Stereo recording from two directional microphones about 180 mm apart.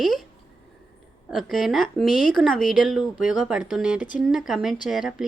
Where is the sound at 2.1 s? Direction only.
50° left (ahead or behind).